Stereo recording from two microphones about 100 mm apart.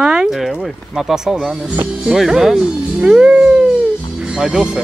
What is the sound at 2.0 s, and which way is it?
Speech, 5° right (ahead or behind).